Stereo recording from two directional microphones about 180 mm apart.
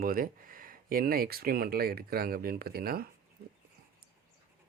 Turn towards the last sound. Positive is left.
turn(degrees=-60)  # may be behind; listen again after turning